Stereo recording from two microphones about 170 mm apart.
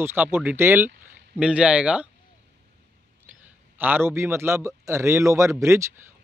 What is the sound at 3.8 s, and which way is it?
Speech, 10° right (ahead or behind).